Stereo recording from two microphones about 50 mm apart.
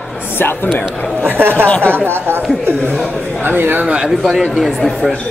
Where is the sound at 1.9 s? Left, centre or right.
Right.